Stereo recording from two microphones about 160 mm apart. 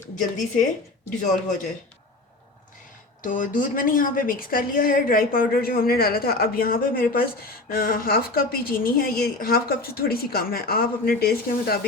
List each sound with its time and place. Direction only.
0.3 s a woman's voice: 55° left (ahead or behind)
3.2 s a woman's voice: 55° left (ahead or behind); by 11.9 s 70° left (ahead or behind)